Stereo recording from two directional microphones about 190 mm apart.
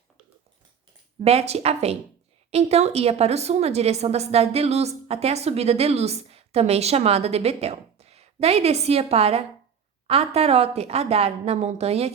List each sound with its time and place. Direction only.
1.2 s a woman's voice: 35° right (ahead or behind)